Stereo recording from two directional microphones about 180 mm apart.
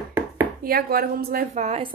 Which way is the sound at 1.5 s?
35° right (ahead or behind).